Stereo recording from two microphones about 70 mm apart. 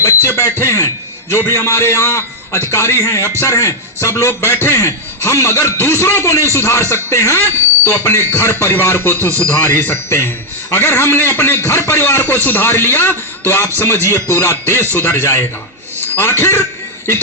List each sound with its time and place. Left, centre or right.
0.0 s a man's voice: left